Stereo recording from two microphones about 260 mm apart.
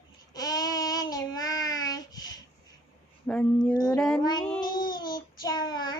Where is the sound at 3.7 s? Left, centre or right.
Centre.